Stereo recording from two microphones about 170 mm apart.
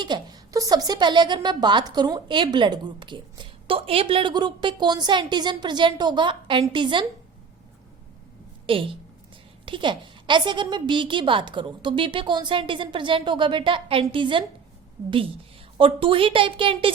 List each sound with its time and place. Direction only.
0.0 s a woman's voice: 25° right (ahead or behind)
8.6 s a woman's voice: 30° right (ahead or behind)
15.8 s a woman's voice: 30° right (ahead or behind)